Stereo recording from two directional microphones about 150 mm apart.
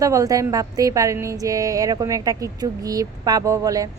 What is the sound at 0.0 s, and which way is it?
Speech, 20° right (ahead or behind).